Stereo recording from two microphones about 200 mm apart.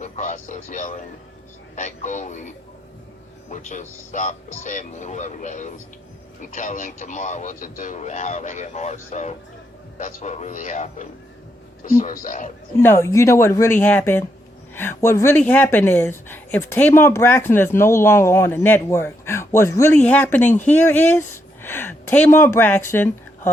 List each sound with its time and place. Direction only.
0.0 s speech: 40° left (ahead or behind)
3.5 s speech: 40° left (ahead or behind)
12.8 s speech: 10° left (ahead or behind)